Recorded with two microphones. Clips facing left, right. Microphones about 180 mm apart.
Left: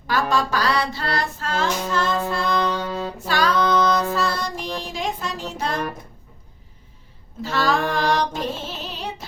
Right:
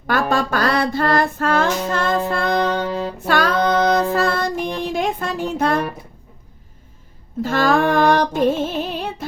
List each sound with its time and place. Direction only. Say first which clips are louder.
0.1 s a sound: right 3 dB; 55° right (ahead or behind)
2.2 s child singing: right 3 dB; 55° right (ahead or behind)
3.2 s female singing: right 2 dB; 55° right (ahead or behind)
4.1 s music: right 5 dB; 55° right (ahead or behind)
7.4 s female singing: right 5 dB; 50° right (ahead or behind)